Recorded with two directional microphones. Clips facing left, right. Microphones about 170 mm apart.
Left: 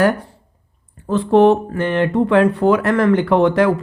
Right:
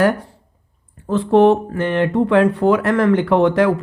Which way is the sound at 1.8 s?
20° right (ahead or behind).